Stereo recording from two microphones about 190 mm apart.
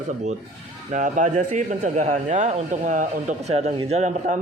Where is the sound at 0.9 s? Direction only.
40° right (ahead or behind).